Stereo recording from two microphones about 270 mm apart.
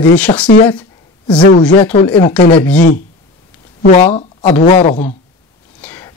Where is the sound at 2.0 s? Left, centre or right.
Centre.